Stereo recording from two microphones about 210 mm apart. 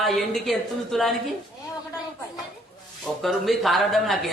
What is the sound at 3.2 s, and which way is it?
Speech, centre (ahead or behind).